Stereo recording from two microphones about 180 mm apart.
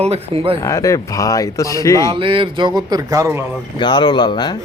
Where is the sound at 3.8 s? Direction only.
25° left (ahead or behind).